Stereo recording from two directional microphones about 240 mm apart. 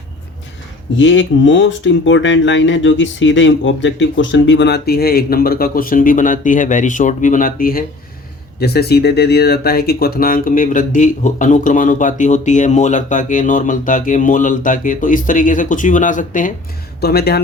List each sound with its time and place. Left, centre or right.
0.9 s speech: left